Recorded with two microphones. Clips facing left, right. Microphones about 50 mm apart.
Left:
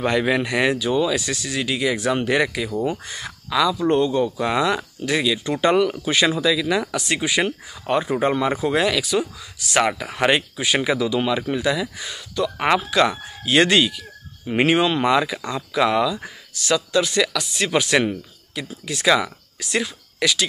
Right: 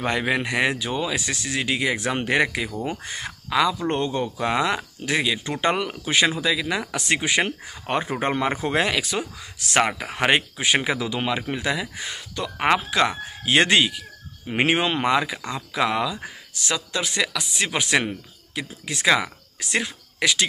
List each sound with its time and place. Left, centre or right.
0.0 s speech: centre
7.0 s speech: right
9.8 s speech: centre
10.6 s speech: right
12.5 s speech: centre
15.8 s speech: centre
16.5 s speech: right